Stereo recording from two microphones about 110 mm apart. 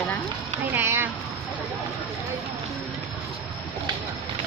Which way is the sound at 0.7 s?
20° right (ahead or behind).